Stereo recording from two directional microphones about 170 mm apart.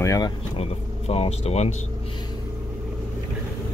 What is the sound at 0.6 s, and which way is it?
Speech, 35° left (ahead or behind).